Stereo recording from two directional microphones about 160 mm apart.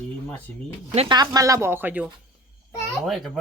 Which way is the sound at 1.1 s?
25° right (ahead or behind).